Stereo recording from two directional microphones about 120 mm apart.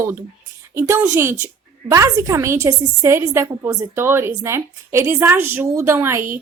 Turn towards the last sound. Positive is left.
turn(degrees=-20)  # may be behind; listen again after turning